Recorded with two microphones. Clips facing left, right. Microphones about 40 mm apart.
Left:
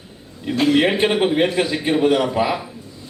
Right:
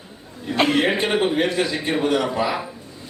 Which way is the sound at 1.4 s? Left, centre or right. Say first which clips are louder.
Left 3 dB; left.